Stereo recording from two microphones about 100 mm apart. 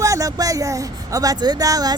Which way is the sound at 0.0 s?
35° right (ahead or behind).